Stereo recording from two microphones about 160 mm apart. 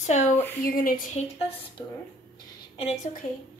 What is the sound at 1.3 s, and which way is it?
A woman's voice, 35° left (ahead or behind).